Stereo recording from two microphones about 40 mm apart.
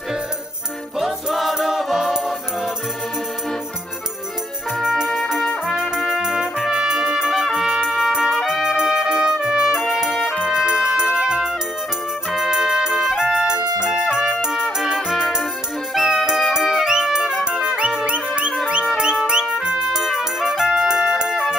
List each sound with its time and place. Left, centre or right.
0.9 s music: centre
5.0 s trumpet: centre
6.1 s trumpet: centre
6.8 s music: centre
8.5 s music: centre
14.6 s music: centre
18.0 s music: right
19.9 s music: centre